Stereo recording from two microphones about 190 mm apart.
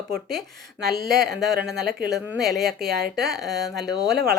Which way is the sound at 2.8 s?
55° right (ahead or behind).